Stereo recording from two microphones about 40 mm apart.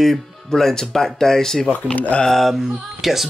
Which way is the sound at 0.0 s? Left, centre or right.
Centre.